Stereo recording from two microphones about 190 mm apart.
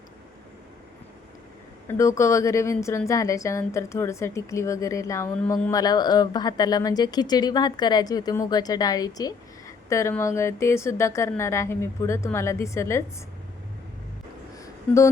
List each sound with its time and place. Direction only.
1.9 s a woman's voice: 15° left (ahead or behind)
5.7 s speech: 20° left (ahead or behind)
14.6 s a sound: 15° left (ahead or behind)